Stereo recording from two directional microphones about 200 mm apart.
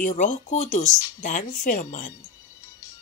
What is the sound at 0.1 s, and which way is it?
Speech, 40° left (ahead or behind).